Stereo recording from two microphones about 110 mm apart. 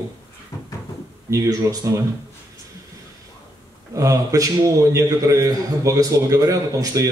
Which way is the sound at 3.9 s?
30° right (ahead or behind).